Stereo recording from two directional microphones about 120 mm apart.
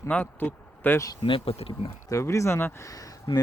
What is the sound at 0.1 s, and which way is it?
Speech, 15° left (ahead or behind).